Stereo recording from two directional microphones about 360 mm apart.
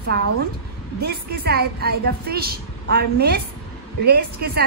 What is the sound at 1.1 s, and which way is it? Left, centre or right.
A woman's voice, right.